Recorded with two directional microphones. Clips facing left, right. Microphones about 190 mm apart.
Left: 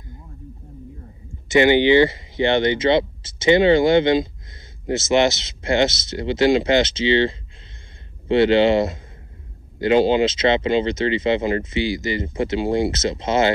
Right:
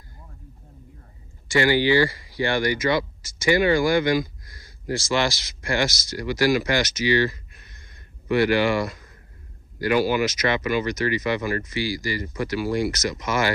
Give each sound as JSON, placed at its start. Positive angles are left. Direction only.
{"t": 1.5, "sound": "speech", "side_deg": 20}